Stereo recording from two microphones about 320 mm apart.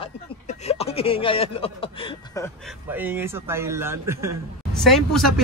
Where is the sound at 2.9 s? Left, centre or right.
Centre.